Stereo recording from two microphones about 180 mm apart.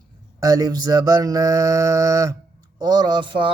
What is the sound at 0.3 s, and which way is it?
Mantra, 20° right (ahead or behind).